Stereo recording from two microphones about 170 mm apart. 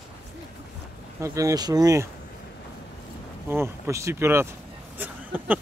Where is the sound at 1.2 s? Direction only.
20° right (ahead or behind).